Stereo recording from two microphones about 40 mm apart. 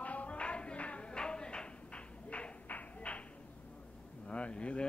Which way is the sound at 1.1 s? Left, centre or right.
Left.